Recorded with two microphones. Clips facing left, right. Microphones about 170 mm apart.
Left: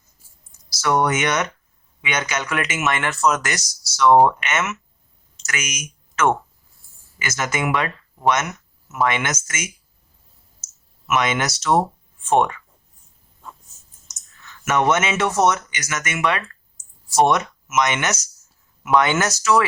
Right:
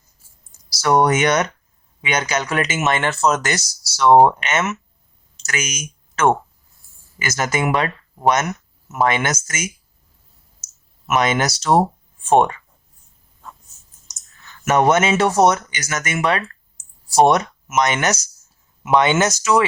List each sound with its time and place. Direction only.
0.8 s speech: 35° right (ahead or behind)
11.0 s speech: 35° right (ahead or behind)
14.7 s speech: 35° right (ahead or behind)
18.8 s speech: 20° right (ahead or behind)